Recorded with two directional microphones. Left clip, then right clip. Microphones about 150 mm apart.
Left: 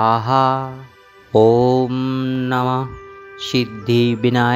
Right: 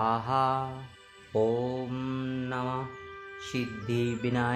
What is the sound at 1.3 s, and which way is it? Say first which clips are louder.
Speech: left 15 dB; 50° left (ahead or behind).